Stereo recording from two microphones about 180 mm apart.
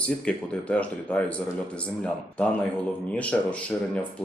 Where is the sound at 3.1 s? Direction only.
5° left (ahead or behind).